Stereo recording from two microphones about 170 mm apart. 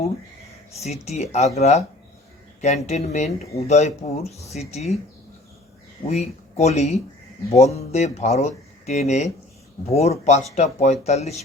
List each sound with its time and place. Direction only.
0.8 s speech: 40° left (ahead or behind)
6.1 s speech: 40° left (ahead or behind)